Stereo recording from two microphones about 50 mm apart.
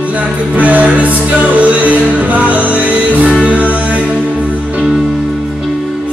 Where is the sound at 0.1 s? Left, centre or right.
Right.